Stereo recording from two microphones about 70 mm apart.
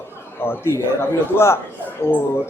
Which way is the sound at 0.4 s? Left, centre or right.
Left.